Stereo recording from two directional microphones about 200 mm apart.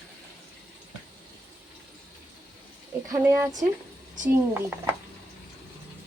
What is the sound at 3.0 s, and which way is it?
Speech, 15° right (ahead or behind).